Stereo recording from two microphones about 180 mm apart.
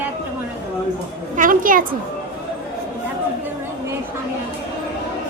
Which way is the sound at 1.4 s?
50° right (ahead or behind).